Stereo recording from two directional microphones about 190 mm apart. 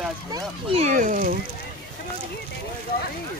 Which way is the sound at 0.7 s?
40° right (ahead or behind).